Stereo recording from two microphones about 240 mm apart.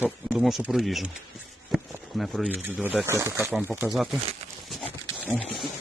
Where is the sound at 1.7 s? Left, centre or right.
Centre.